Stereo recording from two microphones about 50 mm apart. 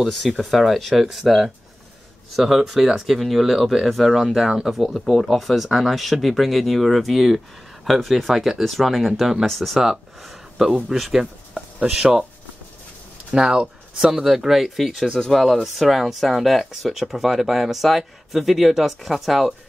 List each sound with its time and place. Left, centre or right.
0.0 s speech: centre
4.5 s speech: centre
4.7 s speech: centre
9.5 s speech: centre
13.3 s speech: centre
14.1 s speech: centre